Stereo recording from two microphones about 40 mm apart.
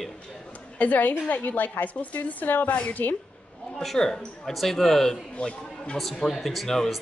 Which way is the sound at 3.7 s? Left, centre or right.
Centre.